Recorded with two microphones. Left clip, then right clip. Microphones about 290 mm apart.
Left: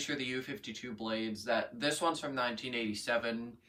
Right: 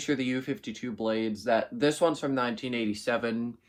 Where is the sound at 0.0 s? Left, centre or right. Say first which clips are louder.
Right 7 dB; centre.